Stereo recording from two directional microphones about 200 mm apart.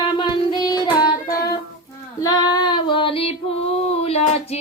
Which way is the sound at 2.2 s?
20° left (ahead or behind).